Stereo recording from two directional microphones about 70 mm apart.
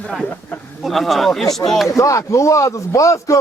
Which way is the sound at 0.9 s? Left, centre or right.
Centre.